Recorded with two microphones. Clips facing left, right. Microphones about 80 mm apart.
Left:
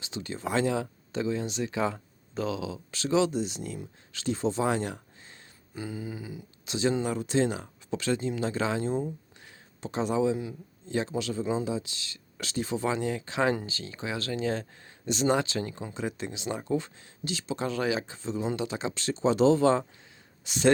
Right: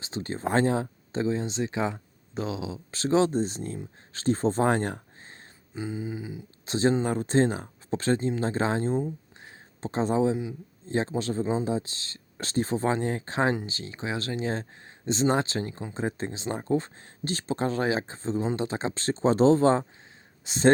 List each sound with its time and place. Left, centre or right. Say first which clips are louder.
0.0 s speech: right 4 dB; right
5.7 s speech: right 3 dB; right
9.4 s a sound: right 3 dB; right
10.3 s speech: right 2 dB; right
13.5 s speech: right 1 dB; right